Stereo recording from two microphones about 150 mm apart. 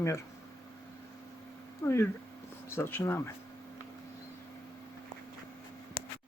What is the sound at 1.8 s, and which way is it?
Speech, 15° left (ahead or behind).